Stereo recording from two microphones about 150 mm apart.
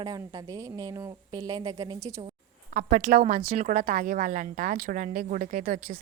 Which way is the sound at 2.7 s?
70° right (ahead or behind).